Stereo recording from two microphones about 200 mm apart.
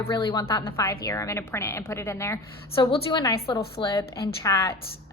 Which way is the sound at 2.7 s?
25° left (ahead or behind).